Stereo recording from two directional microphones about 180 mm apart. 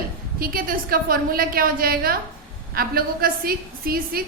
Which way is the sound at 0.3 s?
55° right (ahead or behind).